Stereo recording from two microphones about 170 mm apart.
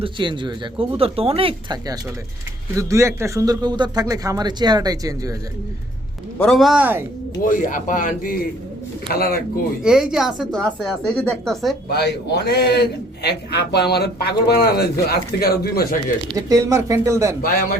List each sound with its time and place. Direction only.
0.0 s speech: 30° right (ahead or behind)
2.7 s a man's voice: 15° right (ahead or behind)
6.4 s speech: centre (ahead or behind)
7.4 s a man's voice: 50° left (ahead or behind)
9.8 s speech: 5° right (ahead or behind)
11.9 s a man's voice: 70° left (ahead or behind)
16.3 s a man's voice: 20° right (ahead or behind)
17.4 s a man's voice: 55° left (ahead or behind)